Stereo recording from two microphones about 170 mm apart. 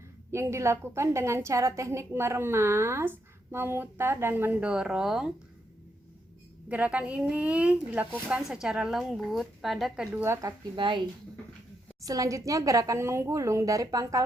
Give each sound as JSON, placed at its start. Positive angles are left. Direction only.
{"t": 0.3, "sound": "a woman's voice", "side_deg": -15}
{"t": 6.7, "sound": "a woman's voice", "side_deg": -10}
{"t": 10.2, "sound": "a woman's voice", "side_deg": -15}
{"t": 10.8, "sound": "a woman's voice", "side_deg": -30}
{"t": 12.0, "sound": "a woman's voice", "side_deg": -20}